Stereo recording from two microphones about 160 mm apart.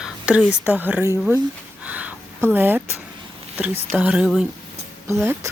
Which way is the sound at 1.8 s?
10° right (ahead or behind).